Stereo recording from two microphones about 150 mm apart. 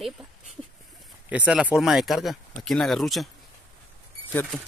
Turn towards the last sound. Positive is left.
turn(degrees=10)  # may be behind; listen again after turning